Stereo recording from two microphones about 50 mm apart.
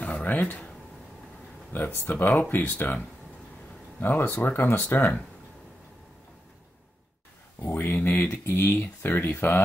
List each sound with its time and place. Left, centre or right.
0.0 s a sound: left
2.0 s speech: left
4.0 s speech: left
7.6 s speech: left